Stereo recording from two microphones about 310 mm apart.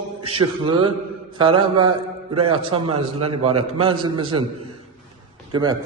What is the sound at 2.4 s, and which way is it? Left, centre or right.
Speech, centre.